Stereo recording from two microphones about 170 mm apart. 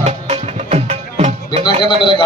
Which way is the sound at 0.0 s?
40° right (ahead or behind).